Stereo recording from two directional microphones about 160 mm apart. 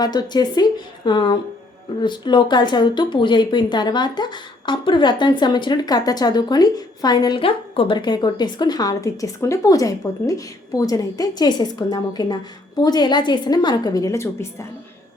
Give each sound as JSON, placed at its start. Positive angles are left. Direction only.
{"t": 0.0, "sound": "speech", "side_deg": 25}